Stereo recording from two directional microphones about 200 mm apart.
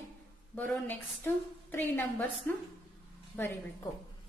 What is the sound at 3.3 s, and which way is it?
Speech, 10° left (ahead or behind).